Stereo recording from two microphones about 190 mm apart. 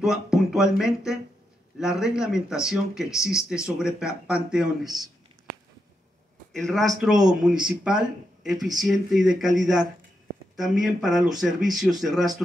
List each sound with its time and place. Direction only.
0.0 s speech: centre (ahead or behind)
6.5 s speech: centre (ahead or behind)